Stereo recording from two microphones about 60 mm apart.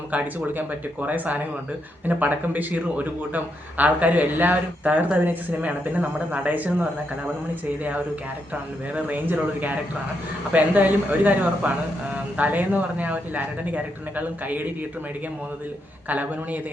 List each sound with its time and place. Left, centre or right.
0.1 s a man's voice: right
9.0 s a man's voice: right
16.0 s a man's voice: right